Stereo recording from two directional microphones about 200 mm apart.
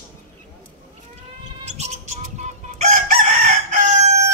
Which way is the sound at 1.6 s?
35° right (ahead or behind).